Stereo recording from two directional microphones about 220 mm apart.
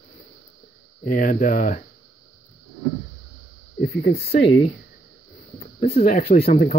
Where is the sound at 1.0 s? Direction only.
35° left (ahead or behind).